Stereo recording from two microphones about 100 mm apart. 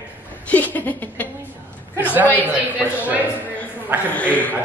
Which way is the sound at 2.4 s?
15° right (ahead or behind).